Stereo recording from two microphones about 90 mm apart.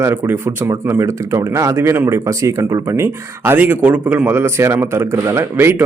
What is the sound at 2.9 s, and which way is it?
Speech, 25° right (ahead or behind).